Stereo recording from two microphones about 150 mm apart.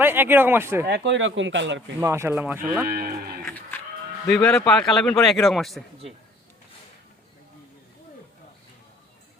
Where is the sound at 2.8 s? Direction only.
90° right.